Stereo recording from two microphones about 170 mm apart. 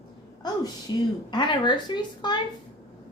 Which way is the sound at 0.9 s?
25° left (ahead or behind).